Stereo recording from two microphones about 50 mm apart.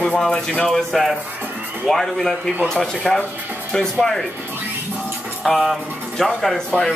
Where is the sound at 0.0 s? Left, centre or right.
Left.